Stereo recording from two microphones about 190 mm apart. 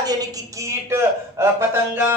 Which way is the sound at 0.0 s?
20° right (ahead or behind).